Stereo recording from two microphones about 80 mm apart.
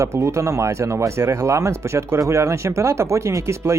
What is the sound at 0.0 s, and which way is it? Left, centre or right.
Speech, right.